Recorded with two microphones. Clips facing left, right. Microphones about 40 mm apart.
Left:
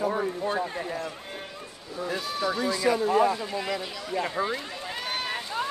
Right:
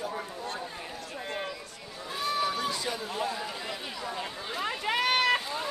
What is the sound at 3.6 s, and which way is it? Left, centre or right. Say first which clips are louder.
Speech: left 6 dB; left.